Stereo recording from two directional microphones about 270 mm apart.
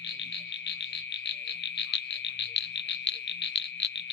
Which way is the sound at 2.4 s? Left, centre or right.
Left.